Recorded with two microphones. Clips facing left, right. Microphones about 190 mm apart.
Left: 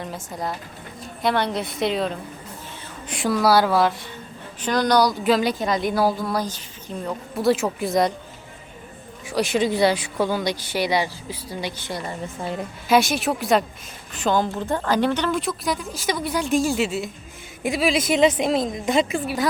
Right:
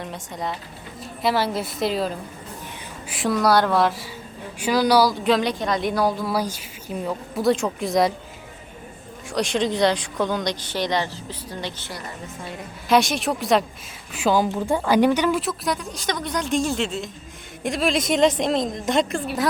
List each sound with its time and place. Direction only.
0.0 s a woman's voice: centre (ahead or behind)
9.2 s speech: 5° left (ahead or behind)
12.9 s a woman's voice: 5° left (ahead or behind)